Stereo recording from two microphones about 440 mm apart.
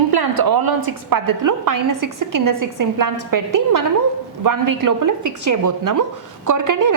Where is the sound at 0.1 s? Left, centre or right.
Right.